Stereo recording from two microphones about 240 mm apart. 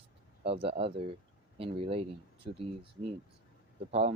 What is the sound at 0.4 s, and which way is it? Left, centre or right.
Speech, right.